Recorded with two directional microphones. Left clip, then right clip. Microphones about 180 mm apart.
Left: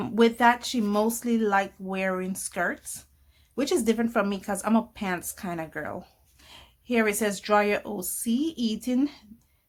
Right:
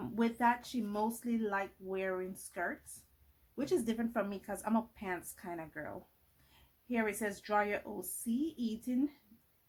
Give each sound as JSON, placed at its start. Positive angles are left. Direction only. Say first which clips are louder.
{"t": 0.0, "sound": "speech", "louder": "left 12 dB", "side_deg": 35}